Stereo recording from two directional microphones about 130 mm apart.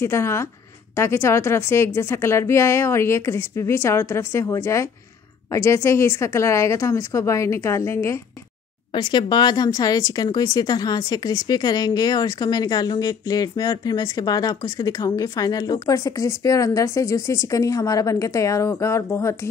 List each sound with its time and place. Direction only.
0.0 s speech: 20° left (ahead or behind)
8.9 s speech: 35° left (ahead or behind)